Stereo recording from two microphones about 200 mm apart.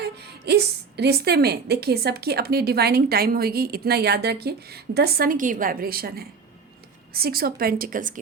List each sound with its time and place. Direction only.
0.0 s a woman's voice: 55° right (ahead or behind)